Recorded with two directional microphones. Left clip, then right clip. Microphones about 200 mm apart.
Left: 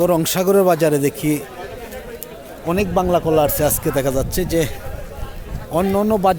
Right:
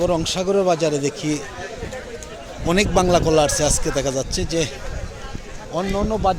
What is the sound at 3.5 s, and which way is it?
Speech, 15° left (ahead or behind).